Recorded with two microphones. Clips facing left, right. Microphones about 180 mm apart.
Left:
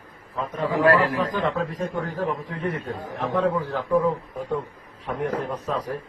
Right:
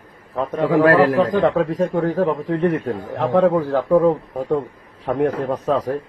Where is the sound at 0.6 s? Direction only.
90° right.